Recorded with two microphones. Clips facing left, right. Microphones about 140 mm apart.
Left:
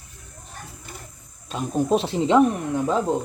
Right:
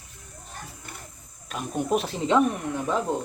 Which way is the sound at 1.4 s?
30° left (ahead or behind).